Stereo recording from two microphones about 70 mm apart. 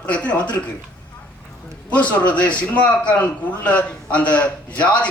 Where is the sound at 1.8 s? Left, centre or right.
Left.